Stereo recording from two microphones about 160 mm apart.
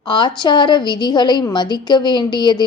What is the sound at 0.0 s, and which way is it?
A woman's voice, 30° left (ahead or behind).